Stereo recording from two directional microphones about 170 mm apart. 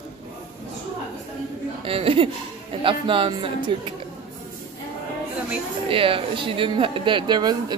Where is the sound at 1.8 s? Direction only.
35° right (ahead or behind).